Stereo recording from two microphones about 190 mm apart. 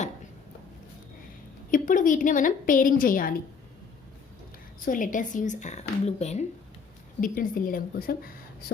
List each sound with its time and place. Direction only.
1.7 s a woman's voice: 45° left (ahead or behind)
4.9 s speech: 45° left (ahead or behind)
7.2 s a woman's voice: 45° left (ahead or behind)